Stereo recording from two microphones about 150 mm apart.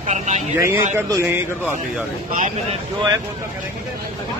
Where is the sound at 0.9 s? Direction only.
20° right (ahead or behind).